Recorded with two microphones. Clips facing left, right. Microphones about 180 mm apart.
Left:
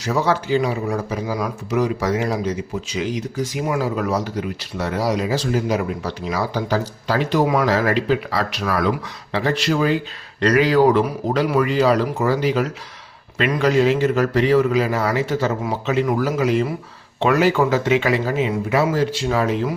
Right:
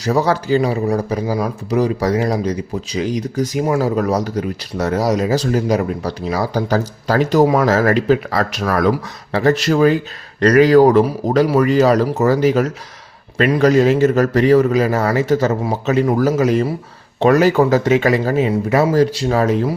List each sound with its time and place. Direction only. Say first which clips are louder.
0.0 s a man's voice: right 4 dB; 40° right (ahead or behind)